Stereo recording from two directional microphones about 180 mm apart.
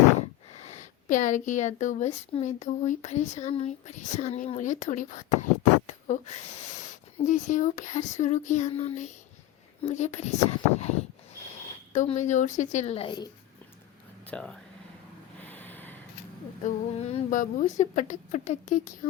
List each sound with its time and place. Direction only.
0.5 s speech: 40° left (ahead or behind)
11.9 s speech: 40° left (ahead or behind)
14.3 s speech: 5° left (ahead or behind)
15.4 s snort: 10° left (ahead or behind)
16.6 s speech: 40° left (ahead or behind)